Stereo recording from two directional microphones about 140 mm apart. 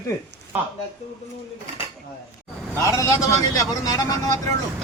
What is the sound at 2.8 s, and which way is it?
Speech, 20° left (ahead or behind).